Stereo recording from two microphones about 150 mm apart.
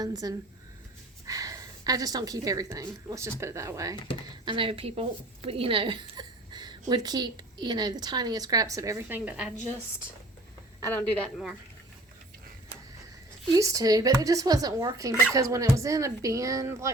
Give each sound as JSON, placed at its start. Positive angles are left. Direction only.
{"t": 0.0, "sound": "a woman's voice", "side_deg": -25}
{"t": 4.4, "sound": "a woman's voice", "side_deg": -35}
{"t": 10.8, "sound": "a sound", "side_deg": 20}
{"t": 13.5, "sound": "a woman's voice", "side_deg": -25}